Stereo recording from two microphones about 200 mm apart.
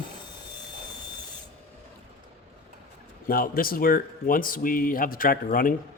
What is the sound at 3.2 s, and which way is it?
A man's voice, 45° left (ahead or behind).